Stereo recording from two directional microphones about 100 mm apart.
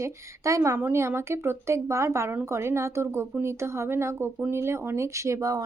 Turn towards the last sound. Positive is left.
turn(degrees=-35)  # may be behind; listen again after turning